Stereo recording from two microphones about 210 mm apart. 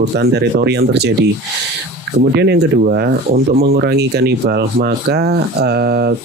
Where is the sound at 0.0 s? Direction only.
55° right (ahead or behind).